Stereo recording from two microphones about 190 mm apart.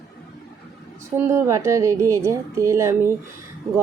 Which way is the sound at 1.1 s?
15° right (ahead or behind).